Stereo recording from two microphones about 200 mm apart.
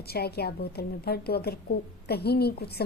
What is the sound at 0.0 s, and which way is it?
A woman's voice, 50° left (ahead or behind).